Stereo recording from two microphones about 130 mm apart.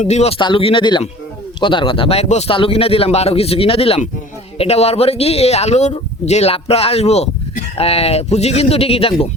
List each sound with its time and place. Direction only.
0.0 s speech: 60° left (ahead or behind)
0.3 s speech: 40° left (ahead or behind)